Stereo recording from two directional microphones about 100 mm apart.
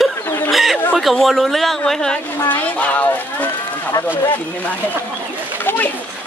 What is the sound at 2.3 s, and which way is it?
Speech, 15° left (ahead or behind).